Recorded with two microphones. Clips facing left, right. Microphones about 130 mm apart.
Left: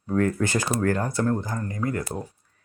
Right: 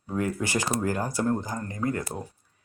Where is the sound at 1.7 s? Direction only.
25° right (ahead or behind).